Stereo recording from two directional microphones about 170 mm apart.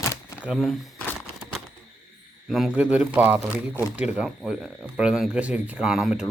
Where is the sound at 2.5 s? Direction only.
Centre (ahead or behind).